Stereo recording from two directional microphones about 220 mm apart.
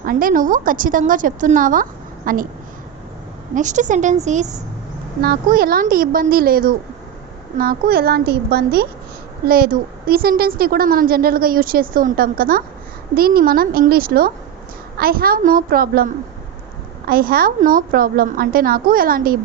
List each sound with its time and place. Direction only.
0.0 s a woman's voice: 40° right (ahead or behind)
3.5 s a woman's voice: 35° right (ahead or behind)
5.2 s a woman's voice: 45° right (ahead or behind)